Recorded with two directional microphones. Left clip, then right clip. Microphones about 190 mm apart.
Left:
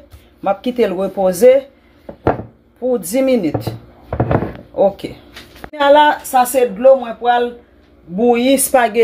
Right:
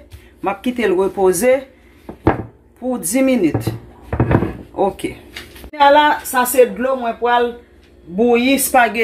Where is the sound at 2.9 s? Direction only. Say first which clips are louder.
Left 2 dB; 55° left (ahead or behind).